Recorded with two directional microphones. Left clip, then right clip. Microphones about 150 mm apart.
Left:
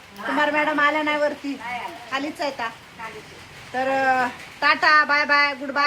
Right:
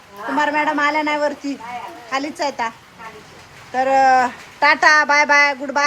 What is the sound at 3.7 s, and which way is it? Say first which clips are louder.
Speech: right 7 dB; 20° right (ahead or behind).